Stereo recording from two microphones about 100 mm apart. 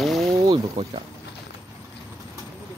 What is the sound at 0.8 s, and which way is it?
Speech, 50° right (ahead or behind).